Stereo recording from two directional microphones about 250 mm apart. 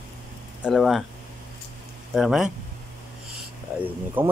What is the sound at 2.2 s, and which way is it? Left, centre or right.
Speech, centre.